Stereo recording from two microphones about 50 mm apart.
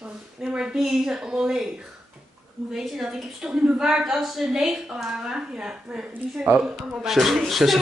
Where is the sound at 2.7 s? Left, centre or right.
Centre.